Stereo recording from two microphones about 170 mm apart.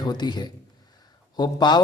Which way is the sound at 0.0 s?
25° left (ahead or behind).